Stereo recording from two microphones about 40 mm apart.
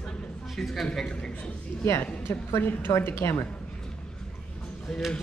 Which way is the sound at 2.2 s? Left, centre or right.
Left.